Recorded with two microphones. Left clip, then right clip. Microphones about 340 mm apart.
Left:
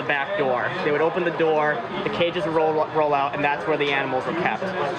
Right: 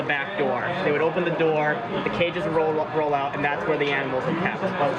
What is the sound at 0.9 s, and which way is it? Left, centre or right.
Speech, left.